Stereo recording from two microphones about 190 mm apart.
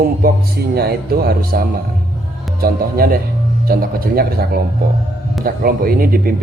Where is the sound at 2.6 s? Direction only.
50° right (ahead or behind).